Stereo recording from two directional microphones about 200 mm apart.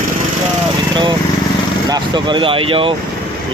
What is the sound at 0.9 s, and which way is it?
Speech, 20° right (ahead or behind).